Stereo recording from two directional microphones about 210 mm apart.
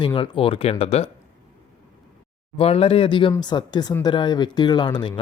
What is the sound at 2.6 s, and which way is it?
Speech, 30° left (ahead or behind).